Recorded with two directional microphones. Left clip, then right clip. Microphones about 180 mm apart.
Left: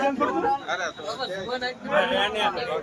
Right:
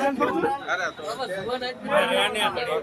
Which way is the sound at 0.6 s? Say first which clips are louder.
Right 2 dB; 10° left (ahead or behind).